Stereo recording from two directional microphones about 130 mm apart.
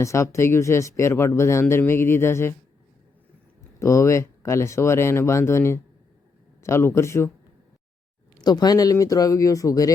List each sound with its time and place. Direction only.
0.0 s speech: 25° left (ahead or behind)
3.8 s speech: 25° left (ahead or behind)
8.4 s speech: 30° left (ahead or behind)